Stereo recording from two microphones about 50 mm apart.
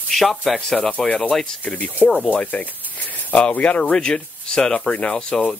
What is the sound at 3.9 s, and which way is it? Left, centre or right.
Speech, centre.